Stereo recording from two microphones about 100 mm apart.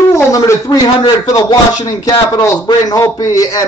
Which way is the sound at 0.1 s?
35° left (ahead or behind).